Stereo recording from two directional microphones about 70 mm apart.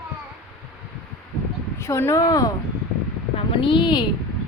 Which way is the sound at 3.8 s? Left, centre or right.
Left.